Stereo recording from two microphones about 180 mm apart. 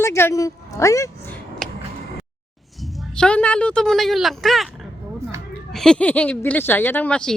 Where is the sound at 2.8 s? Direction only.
Centre (ahead or behind).